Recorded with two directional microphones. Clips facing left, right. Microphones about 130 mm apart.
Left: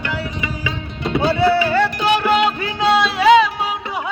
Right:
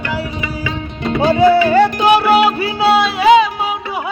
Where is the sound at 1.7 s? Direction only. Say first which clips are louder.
Right 6 dB; 15° right (ahead or behind).